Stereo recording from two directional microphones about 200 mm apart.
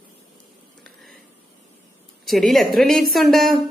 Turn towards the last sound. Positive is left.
turn(degrees=0)  # may be behind; listen again after turning